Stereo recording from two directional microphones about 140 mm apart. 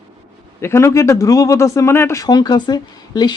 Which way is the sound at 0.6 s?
20° left (ahead or behind).